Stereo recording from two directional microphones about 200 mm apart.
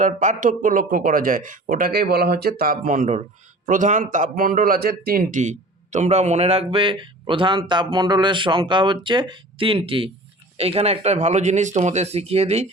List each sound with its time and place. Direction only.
0.0 s a man's voice: 40° right (ahead or behind)